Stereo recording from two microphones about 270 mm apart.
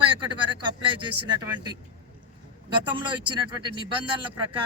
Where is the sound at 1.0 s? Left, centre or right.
Right.